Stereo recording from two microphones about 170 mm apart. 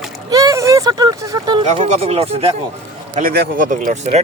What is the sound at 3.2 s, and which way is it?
Speech, 60° right (ahead or behind).